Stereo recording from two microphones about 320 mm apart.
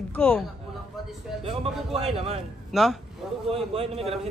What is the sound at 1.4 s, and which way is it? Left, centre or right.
Speech, centre.